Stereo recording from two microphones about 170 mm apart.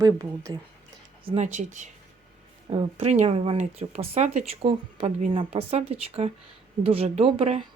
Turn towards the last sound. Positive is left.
turn(degrees=-35)  # may be behind; listen again after turning